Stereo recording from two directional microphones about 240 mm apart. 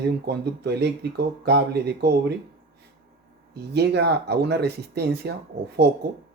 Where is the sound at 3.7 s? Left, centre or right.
Right.